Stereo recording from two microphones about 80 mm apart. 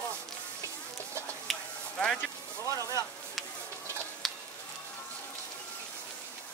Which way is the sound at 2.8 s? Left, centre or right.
Left.